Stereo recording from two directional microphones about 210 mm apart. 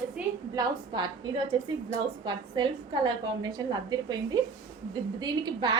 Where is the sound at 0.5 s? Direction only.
20° right (ahead or behind).